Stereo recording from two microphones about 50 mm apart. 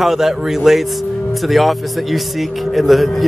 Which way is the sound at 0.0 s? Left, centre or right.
Centre.